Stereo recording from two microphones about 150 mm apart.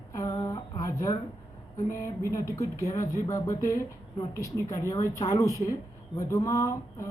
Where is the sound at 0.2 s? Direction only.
25° left (ahead or behind).